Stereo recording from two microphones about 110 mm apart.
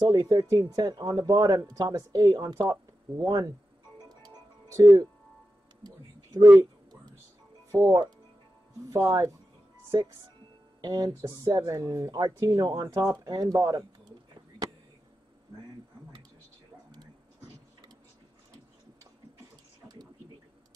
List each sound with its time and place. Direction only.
0.1 s speech: 35° right (ahead or behind)
4.7 s speech: 30° right (ahead or behind)
5.9 s whispering: 35° right (ahead or behind)
7.8 s speech: 40° right (ahead or behind)
10.8 s speech: 30° right (ahead or behind)